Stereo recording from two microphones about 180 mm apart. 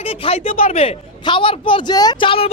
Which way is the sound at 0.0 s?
30° left (ahead or behind).